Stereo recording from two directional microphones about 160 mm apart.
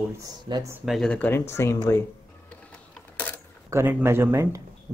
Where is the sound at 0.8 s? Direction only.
Centre (ahead or behind); by 2.0 s 15° left (ahead or behind).